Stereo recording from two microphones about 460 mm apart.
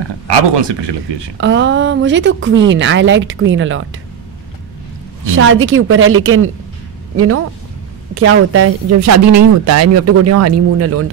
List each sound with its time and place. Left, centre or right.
0.3 s speech: right
1.4 s a woman's voice: right
5.2 s a woman's voice: right
8.1 s a woman's voice: right